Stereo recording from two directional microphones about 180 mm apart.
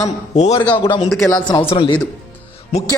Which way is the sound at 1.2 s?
20° left (ahead or behind).